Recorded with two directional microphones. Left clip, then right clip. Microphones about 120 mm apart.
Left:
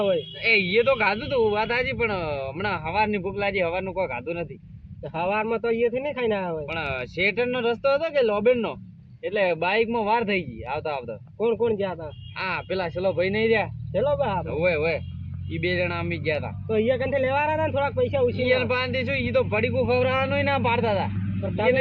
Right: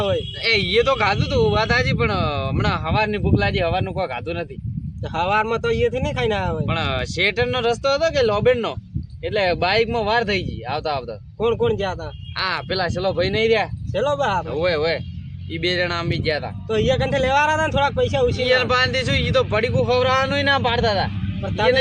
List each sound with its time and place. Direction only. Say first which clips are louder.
0.4 s speech: right 2 dB; 55° right (ahead or behind); by 4.4 s 40° right (ahead or behind)
5.1 s speech: right 5 dB; 25° right (ahead or behind)
6.7 s speech: right 5 dB; 50° right (ahead or behind)
11.3 s speech: right 3 dB; 25° right (ahead or behind)
12.4 s speech: right 5 dB; 55° right (ahead or behind)
13.9 s speech: right 3 dB; 25° right (ahead or behind)
14.6 s speech: right 1 dB; 65° right (ahead or behind)
16.6 s speech: right 3 dB; 25° right (ahead or behind)
18.4 s speech: right 5 dB; 55° right (ahead or behind)